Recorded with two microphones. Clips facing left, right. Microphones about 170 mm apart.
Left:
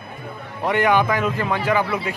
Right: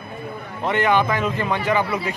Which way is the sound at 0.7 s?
10° left (ahead or behind).